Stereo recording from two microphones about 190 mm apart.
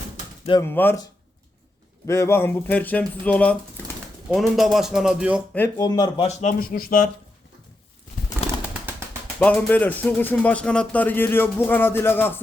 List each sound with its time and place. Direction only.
0.6 s speech: 10° left (ahead or behind)
2.0 s speech: 15° left (ahead or behind); by 5.4 s 5° right (ahead or behind)
5.5 s speech: 15° left (ahead or behind)
6.2 s speech: 40° left (ahead or behind)
9.4 s speech: 10° left (ahead or behind)